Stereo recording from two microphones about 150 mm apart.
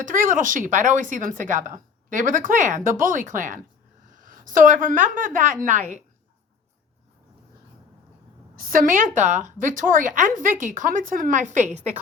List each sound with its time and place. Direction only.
0.0 s a woman's voice: 60° right (ahead or behind)
8.5 s speech: 70° right (ahead or behind); by 11.9 s 50° right (ahead or behind)